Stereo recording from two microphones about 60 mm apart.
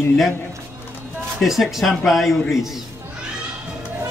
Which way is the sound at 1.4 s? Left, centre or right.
Centre.